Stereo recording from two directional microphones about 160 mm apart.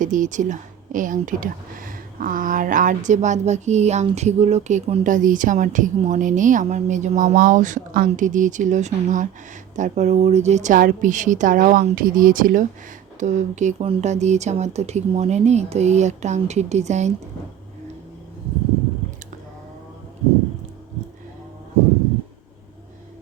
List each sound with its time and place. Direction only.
0.0 s speech: 55° right (ahead or behind)